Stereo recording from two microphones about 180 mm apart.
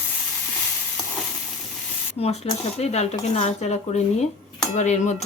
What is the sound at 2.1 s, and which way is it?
Speech, 35° left (ahead or behind).